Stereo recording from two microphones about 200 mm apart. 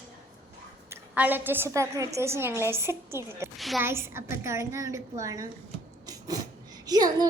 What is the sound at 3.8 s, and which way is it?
A woman's voice, 10° right (ahead or behind).